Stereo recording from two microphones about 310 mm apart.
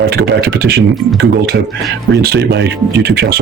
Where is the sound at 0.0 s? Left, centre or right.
Right.